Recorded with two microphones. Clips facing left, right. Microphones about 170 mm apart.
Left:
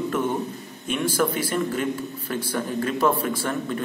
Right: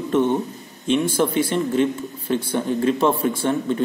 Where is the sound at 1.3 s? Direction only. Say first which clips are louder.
Right 6 dB; 25° right (ahead or behind).